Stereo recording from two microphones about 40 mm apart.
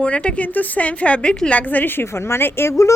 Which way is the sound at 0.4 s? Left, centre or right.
Left.